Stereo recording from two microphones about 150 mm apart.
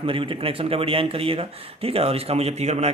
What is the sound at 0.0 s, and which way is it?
Speech, 35° right (ahead or behind).